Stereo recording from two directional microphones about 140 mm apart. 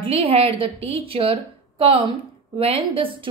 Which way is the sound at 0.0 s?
40° right (ahead or behind).